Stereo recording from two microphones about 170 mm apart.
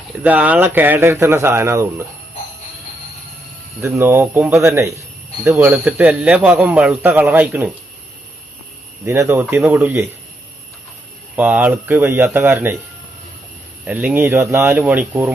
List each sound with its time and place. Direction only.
0.2 s a man's voice: 10° right (ahead or behind)
3.8 s a man's voice: 15° right (ahead or behind)
9.0 s a man's voice: 15° right (ahead or behind)
11.3 s a man's voice: 10° right (ahead or behind)
13.8 s a man's voice: 10° right (ahead or behind)